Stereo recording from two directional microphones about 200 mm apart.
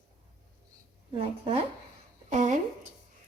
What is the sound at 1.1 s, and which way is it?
Speech, 30° right (ahead or behind).